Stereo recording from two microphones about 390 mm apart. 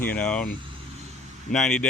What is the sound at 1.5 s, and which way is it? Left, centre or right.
Speech, centre.